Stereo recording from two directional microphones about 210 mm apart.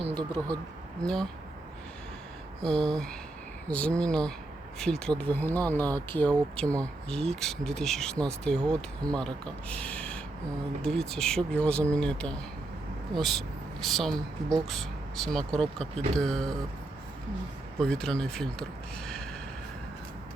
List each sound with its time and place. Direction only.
0.2 s speech: 20° right (ahead or behind)
1.0 s speech: 5° left (ahead or behind)
2.6 s speech: 5° left (ahead or behind)
17.7 s speech: 5° left (ahead or behind)